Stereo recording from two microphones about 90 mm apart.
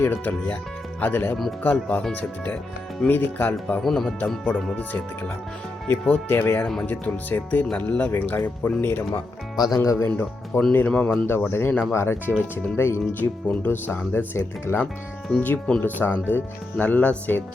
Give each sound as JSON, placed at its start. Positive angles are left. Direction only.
{"t": 0.0, "sound": "speech", "side_deg": 20}
{"t": 3.8, "sound": "speech", "side_deg": 5}
{"t": 4.7, "sound": "speech", "side_deg": 20}
{"t": 9.7, "sound": "speech", "side_deg": 35}
{"t": 10.1, "sound": "speech", "side_deg": 20}
{"t": 11.3, "sound": "speech", "side_deg": 25}
{"t": 15.4, "sound": "speech", "side_deg": 15}